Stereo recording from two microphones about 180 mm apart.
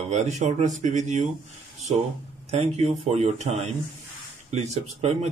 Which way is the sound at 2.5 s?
35° right (ahead or behind).